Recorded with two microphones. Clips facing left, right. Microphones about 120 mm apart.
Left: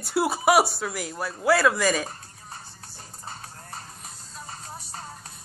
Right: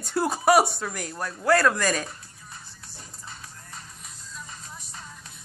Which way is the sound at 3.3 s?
40° left (ahead or behind).